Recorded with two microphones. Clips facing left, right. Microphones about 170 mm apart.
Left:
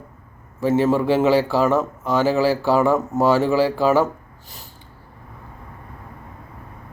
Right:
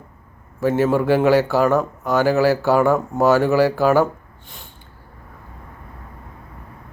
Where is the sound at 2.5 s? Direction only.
Centre (ahead or behind).